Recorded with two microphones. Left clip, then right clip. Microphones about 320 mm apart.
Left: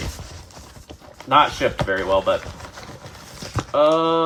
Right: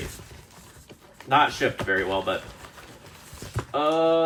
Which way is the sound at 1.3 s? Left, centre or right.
Centre.